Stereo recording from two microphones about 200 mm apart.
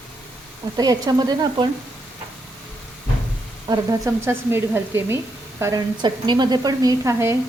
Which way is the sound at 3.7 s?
15° right (ahead or behind).